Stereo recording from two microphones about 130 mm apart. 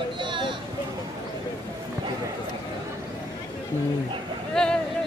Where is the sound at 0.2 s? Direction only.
40° right (ahead or behind).